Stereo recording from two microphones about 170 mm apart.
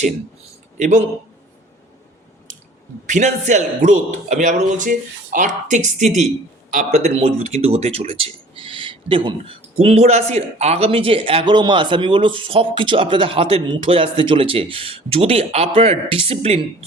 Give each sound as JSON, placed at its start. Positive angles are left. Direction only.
{"t": 0.8, "sound": "a man's voice", "side_deg": -45}
{"t": 3.1, "sound": "a man's voice", "side_deg": -45}